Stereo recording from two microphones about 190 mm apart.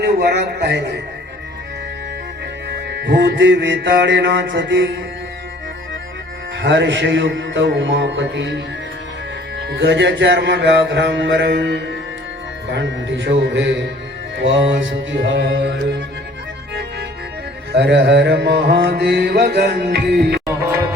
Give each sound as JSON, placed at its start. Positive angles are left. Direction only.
{"t": 0.0, "sound": "mantra", "side_deg": -60}
{"t": 2.6, "sound": "music", "side_deg": -65}
{"t": 6.6, "sound": "music", "side_deg": -70}
{"t": 9.6, "sound": "mantra", "side_deg": -60}
{"t": 12.6, "sound": "music", "side_deg": -65}
{"t": 17.7, "sound": "mantra", "side_deg": -65}